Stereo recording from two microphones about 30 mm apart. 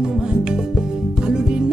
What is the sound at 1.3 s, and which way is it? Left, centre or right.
Music, right.